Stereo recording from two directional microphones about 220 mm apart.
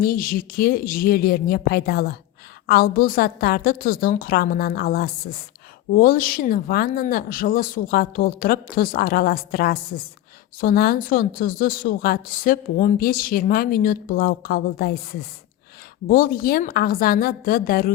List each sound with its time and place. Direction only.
0.0 s a woman's voice: 40° left (ahead or behind)